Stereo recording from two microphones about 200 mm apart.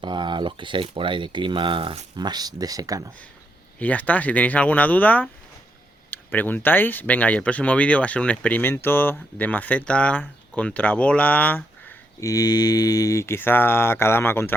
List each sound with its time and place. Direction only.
0.0 s speech: 25° right (ahead or behind)
3.8 s speech: 10° left (ahead or behind)